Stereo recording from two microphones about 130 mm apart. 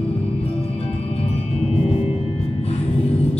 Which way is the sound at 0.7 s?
55° left (ahead or behind).